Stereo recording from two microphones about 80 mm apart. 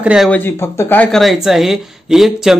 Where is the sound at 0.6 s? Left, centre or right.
Left.